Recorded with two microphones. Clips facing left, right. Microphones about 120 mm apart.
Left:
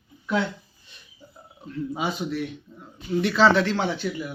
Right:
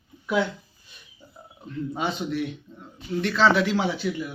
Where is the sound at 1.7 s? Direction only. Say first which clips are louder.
Even; 5° left (ahead or behind).